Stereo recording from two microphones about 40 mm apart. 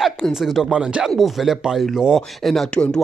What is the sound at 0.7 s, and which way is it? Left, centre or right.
Speech, right.